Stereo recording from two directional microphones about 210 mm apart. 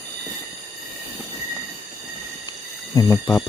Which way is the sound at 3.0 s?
15° left (ahead or behind).